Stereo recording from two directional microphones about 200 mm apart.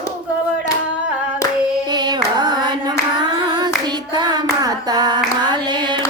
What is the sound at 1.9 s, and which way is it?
Hands, 20° right (ahead or behind).